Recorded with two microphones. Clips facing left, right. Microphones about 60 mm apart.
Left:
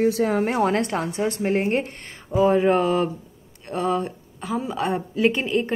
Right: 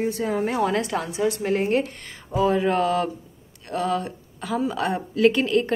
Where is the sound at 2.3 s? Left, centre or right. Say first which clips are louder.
Left 3 dB; left.